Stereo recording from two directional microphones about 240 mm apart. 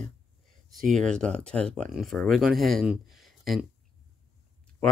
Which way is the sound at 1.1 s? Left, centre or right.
Centre.